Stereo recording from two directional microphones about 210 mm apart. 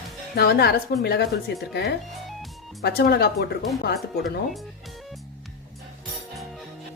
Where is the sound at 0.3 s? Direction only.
50° left (ahead or behind).